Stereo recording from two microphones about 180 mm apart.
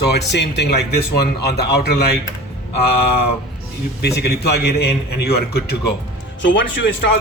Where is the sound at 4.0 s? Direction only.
65° left (ahead or behind).